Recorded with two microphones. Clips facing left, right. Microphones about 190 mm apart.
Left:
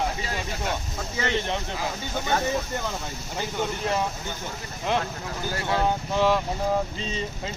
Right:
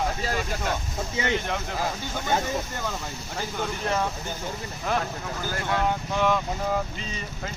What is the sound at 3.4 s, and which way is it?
Speech, 15° left (ahead or behind).